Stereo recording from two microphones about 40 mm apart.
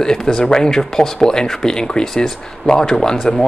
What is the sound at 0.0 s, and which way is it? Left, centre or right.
Speech, centre.